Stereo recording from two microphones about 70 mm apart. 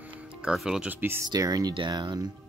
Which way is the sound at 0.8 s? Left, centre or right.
Right.